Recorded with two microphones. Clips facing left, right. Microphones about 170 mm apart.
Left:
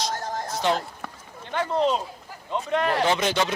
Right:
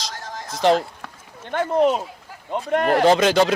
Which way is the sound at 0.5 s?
90° right.